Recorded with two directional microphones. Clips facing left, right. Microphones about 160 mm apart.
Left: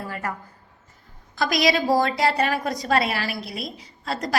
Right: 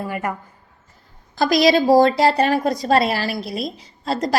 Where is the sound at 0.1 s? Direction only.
15° right (ahead or behind).